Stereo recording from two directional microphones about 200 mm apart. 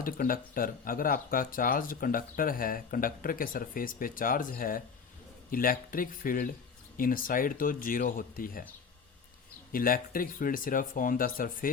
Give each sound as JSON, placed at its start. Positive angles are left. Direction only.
{"t": 0.0, "sound": "speech", "side_deg": 45}
{"t": 9.7, "sound": "speech", "side_deg": 45}